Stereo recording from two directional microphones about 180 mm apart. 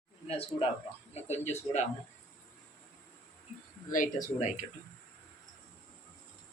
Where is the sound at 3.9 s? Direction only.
45° left (ahead or behind).